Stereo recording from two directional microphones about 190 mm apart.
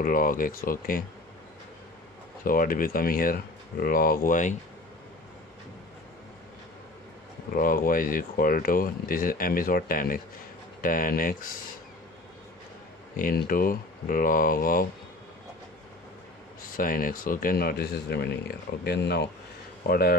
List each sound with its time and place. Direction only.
0.0 s speech: 45° left (ahead or behind)
2.4 s speech: 50° left (ahead or behind)
7.5 s speech: 50° left (ahead or behind)
13.1 s speech: 45° left (ahead or behind)
16.7 s speech: 45° left (ahead or behind)